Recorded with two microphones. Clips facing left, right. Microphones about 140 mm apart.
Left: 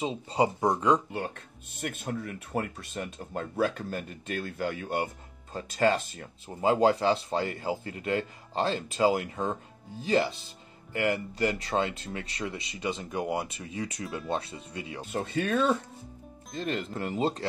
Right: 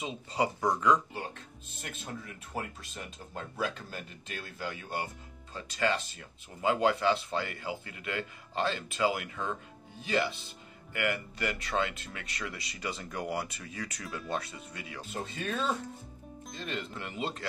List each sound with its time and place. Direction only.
0.0 s speech: 30° left (ahead or behind)
1.8 s speech: 60° left (ahead or behind); by 15.0 s 25° left (ahead or behind)
15.3 s speech: 60° left (ahead or behind)
16.5 s speech: 40° left (ahead or behind)